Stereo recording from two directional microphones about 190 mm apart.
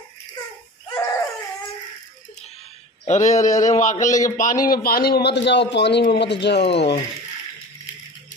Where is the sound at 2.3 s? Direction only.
35° left (ahead or behind).